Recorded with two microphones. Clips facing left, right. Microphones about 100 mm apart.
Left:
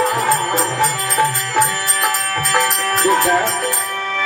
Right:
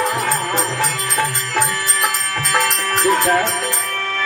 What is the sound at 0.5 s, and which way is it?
Music, 20° left (ahead or behind).